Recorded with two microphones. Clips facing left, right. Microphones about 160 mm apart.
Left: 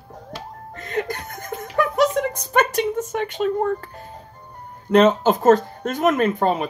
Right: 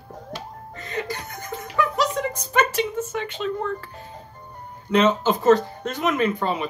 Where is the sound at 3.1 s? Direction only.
50° left (ahead or behind).